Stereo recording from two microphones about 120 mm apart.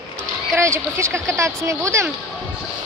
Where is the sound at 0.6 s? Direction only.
25° right (ahead or behind).